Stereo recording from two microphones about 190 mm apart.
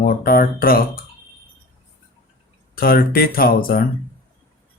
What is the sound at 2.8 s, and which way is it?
Speech, 50° left (ahead or behind).